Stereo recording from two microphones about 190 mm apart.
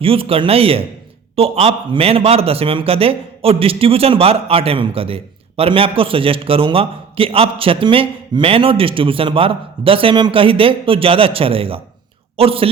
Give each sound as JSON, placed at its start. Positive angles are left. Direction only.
{"t": 0.0, "sound": "a man's voice", "side_deg": -30}